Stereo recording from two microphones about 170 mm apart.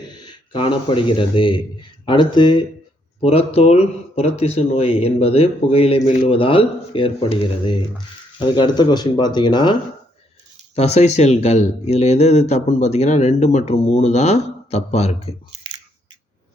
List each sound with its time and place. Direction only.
0.1 s speech: 25° left (ahead or behind)
10.8 s speech: 40° left (ahead or behind)